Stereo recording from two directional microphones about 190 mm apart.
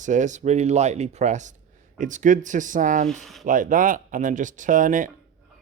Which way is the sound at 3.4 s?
45° right (ahead or behind).